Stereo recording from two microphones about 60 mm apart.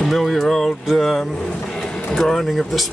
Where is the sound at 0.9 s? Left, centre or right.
Centre.